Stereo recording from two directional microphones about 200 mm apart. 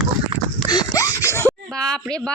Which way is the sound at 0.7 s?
20° left (ahead or behind).